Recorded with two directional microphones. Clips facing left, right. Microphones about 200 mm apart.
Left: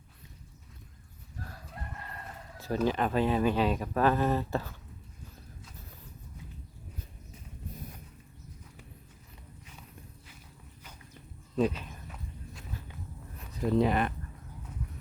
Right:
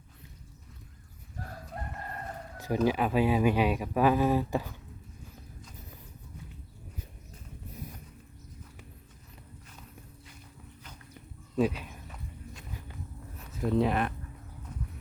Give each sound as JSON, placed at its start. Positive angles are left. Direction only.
{"t": 1.7, "sound": "music", "side_deg": -45}
{"t": 2.6, "sound": "speech", "side_deg": -15}
{"t": 11.5, "sound": "walk", "side_deg": -10}
{"t": 13.4, "sound": "speech", "side_deg": 0}